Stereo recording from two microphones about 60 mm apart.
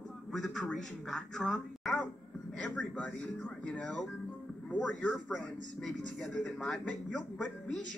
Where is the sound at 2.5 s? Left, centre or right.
Left.